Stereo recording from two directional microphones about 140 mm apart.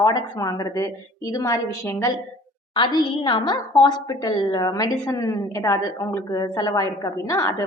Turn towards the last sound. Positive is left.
turn(degrees=25)  # may be behind; listen again after turning